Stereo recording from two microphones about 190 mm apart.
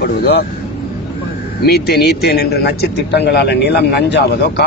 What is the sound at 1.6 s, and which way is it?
A man's voice, 55° left (ahead or behind).